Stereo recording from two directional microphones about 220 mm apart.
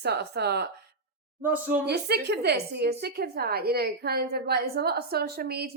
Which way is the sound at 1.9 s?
45° right (ahead or behind).